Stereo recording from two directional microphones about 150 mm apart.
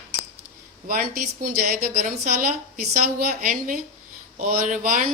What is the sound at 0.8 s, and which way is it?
A woman's voice, 75° right (ahead or behind).